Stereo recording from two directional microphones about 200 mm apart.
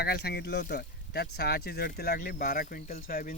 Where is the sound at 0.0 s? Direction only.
55° left (ahead or behind).